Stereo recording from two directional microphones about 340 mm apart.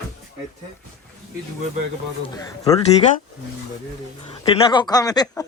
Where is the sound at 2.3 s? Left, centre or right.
Centre.